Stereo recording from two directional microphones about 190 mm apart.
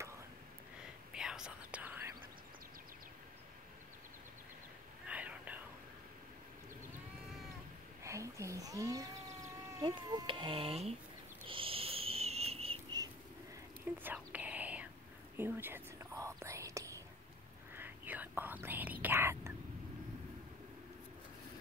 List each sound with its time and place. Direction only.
1.1 s whispering: 5° right (ahead or behind)
5.0 s whispering: 5° right (ahead or behind)
8.0 s speech: 15° right (ahead or behind)
11.4 s a sound: 30° right (ahead or behind)
13.9 s whispering: 10° right (ahead or behind)